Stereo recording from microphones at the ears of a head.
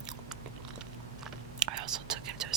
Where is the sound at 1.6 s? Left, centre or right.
Right.